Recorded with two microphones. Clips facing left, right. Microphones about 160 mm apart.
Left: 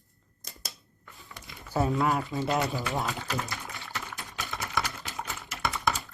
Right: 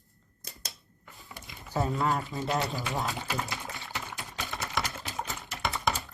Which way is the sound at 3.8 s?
20° right (ahead or behind).